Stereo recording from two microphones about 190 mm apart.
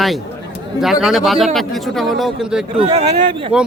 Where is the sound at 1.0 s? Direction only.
Centre (ahead or behind).